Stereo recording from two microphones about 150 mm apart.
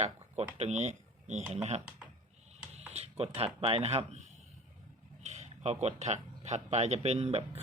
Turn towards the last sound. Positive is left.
turn(degrees=-45)  # may be behind; listen again after turning